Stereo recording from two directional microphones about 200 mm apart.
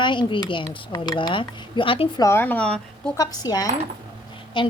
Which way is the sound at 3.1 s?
20° left (ahead or behind).